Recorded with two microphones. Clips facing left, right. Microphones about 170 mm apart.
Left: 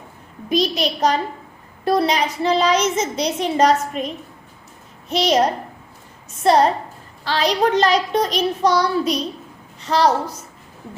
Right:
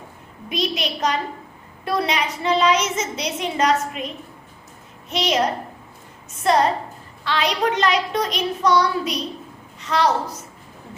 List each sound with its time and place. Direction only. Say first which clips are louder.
0.5 s a child's voice: left 5 dB; 35° left (ahead or behind)